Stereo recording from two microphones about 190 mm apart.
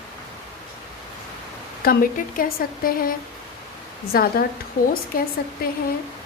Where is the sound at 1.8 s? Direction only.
50° left (ahead or behind).